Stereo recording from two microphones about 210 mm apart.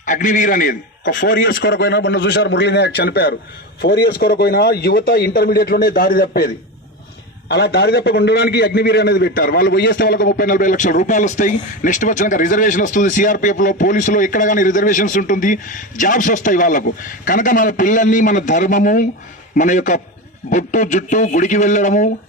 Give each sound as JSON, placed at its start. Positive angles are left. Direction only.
{"t": 0.0, "sound": "a man's voice", "side_deg": 35}